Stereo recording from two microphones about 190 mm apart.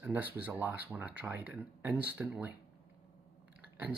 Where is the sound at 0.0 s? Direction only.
10° right (ahead or behind).